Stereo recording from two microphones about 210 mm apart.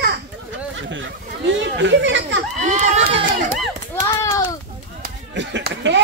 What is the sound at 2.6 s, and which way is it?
Speech, 35° right (ahead or behind).